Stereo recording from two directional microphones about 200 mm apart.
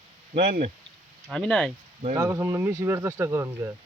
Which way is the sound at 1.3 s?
Centre (ahead or behind).